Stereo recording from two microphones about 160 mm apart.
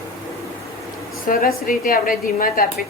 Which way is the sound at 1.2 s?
60° left (ahead or behind).